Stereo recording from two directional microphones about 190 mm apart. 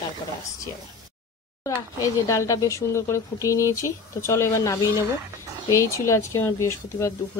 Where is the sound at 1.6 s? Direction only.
15° left (ahead or behind).